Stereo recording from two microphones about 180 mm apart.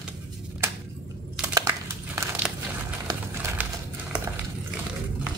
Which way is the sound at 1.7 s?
10° right (ahead or behind).